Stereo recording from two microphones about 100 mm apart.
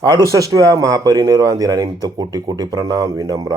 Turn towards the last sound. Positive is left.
turn(degrees=-40)  # may be behind; listen again after turning